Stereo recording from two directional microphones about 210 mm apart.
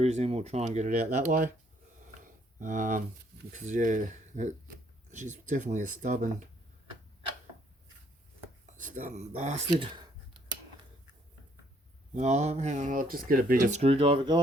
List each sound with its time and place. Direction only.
0.0 s speech: 30° right (ahead or behind)
2.2 s a sound: 40° right (ahead or behind)
3.5 s speech: 35° right (ahead or behind)
8.8 s speech: 35° right (ahead or behind)
9.8 s speech: 20° right (ahead or behind)
12.1 s speech: 35° right (ahead or behind)